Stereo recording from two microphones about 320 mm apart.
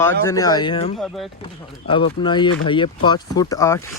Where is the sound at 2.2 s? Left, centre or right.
Centre.